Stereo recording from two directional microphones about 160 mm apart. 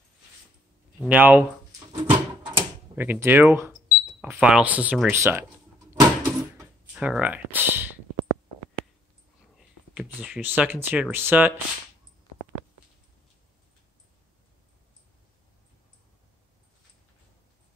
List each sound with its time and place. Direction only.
1.0 s speech: 10° right (ahead or behind)
1.9 s a sound: 35° right (ahead or behind)
3.0 s speech: 10° right (ahead or behind)
5.1 s speech: 15° right (ahead or behind)
5.9 s a sound: 20° right (ahead or behind)
6.9 s speech: 5° right (ahead or behind)
9.6 s speech: 5° right (ahead or behind)